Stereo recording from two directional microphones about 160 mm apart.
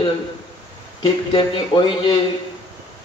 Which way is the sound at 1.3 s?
30° left (ahead or behind).